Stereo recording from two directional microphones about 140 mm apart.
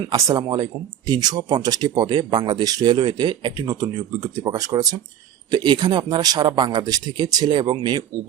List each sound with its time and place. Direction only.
0.1 s speech: 25° right (ahead or behind)